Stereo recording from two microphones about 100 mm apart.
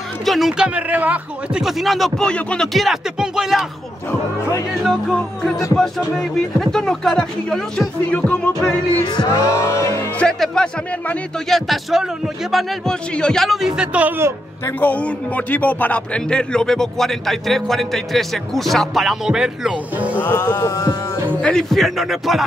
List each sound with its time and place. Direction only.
0.2 s speech: centre (ahead or behind)
1.6 s a man's voice: centre (ahead or behind)
6.1 s a man's voice: 5° left (ahead or behind)
8.1 s music: 15° left (ahead or behind)
9.1 s music: 40° left (ahead or behind)
10.1 s a man's voice: 10° left (ahead or behind); by 14.3 s 20° right (ahead or behind)
14.8 s a man's voice: 15° left (ahead or behind); by 20.2 s 15° right (ahead or behind)
20.2 s music: 15° left (ahead or behind)
20.4 s a sound: 40° left (ahead or behind)
21.4 s a man's voice: 10° left (ahead or behind)